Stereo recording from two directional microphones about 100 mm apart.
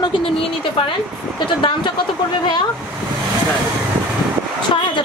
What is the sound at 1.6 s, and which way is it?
Speech, 55° left (ahead or behind).